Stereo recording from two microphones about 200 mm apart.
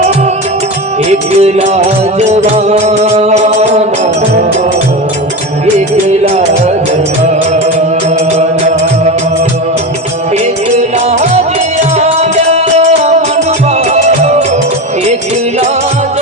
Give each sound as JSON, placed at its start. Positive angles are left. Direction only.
{"t": 1.1, "sound": "music", "side_deg": -35}
{"t": 6.1, "sound": "music", "side_deg": -35}
{"t": 8.4, "sound": "music", "side_deg": -35}
{"t": 10.8, "sound": "music", "side_deg": -35}